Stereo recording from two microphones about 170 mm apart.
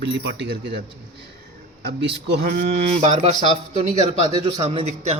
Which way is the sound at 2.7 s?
35° right (ahead or behind).